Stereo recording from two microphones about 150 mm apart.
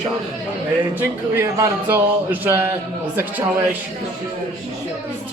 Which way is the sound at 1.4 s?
15° right (ahead or behind).